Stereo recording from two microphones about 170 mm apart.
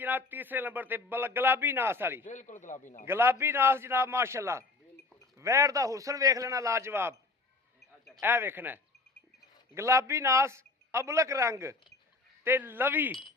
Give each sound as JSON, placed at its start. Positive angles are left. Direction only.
{"t": 0.0, "sound": "speech", "side_deg": -10}
{"t": 2.2, "sound": "a man's voice", "side_deg": 45}
{"t": 3.1, "sound": "a man's voice", "side_deg": -15}
{"t": 8.2, "sound": "speech", "side_deg": -15}